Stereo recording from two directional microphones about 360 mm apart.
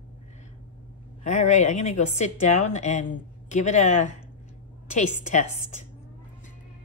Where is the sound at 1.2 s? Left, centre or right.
Centre.